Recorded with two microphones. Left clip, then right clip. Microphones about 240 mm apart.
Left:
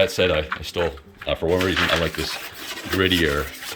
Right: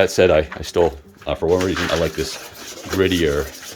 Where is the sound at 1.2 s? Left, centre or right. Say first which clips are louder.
Right 3 dB; centre.